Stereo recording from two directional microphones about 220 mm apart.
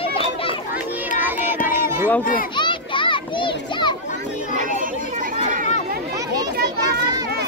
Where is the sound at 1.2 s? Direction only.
10° right (ahead or behind).